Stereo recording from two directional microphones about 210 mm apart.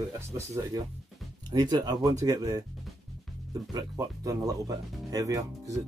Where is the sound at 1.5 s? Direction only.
20° right (ahead or behind).